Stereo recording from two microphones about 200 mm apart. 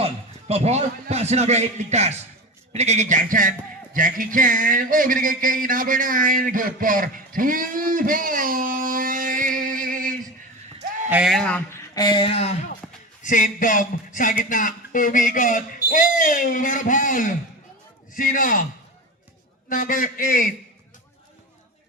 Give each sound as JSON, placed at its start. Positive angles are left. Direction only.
{"t": 0.0, "sound": "a man's voice", "side_deg": -30}
{"t": 10.8, "sound": "a sound", "side_deg": -35}
{"t": 11.1, "sound": "speech", "side_deg": -5}
{"t": 11.9, "sound": "a man's voice", "side_deg": 20}
{"t": 19.6, "sound": "a man's voice", "side_deg": 40}